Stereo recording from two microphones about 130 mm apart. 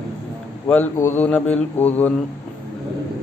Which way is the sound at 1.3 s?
10° left (ahead or behind).